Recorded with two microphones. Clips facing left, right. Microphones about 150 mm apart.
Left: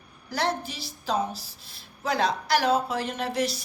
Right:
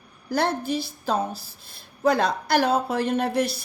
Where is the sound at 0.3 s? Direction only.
50° right (ahead or behind).